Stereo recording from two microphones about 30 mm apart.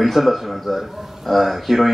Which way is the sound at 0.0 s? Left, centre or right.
Centre.